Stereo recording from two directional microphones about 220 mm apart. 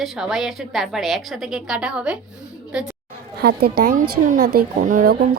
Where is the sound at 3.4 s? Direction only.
45° right (ahead or behind).